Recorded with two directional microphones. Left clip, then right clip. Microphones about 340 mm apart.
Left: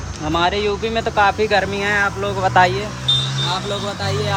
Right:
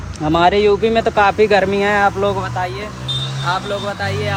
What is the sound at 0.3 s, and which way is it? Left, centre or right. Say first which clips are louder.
Speech: right 6 dB; centre.